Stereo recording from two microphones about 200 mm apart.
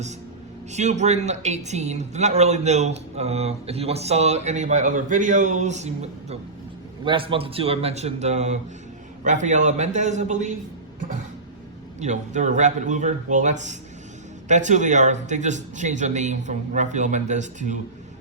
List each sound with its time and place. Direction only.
0.7 s a man's voice: 35° right (ahead or behind)
11.9 s speech: 35° right (ahead or behind)